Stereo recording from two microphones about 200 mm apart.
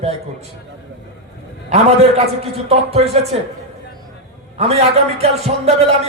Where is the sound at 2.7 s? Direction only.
30° right (ahead or behind).